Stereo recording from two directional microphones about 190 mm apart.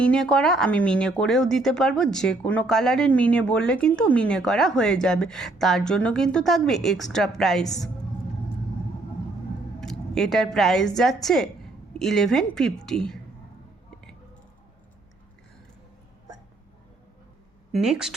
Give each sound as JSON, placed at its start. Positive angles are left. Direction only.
{"t": 0.0, "sound": "speech", "side_deg": 5}
{"t": 9.8, "sound": "a woman's voice", "side_deg": 0}
{"t": 17.7, "sound": "speech", "side_deg": 0}